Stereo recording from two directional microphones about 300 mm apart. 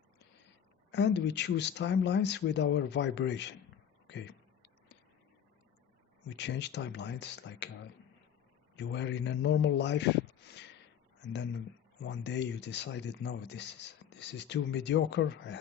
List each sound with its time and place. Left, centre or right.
0.9 s speech: left
4.0 s a sound: left
6.2 s speech: left
8.7 s a man's voice: left
12.0 s speech: left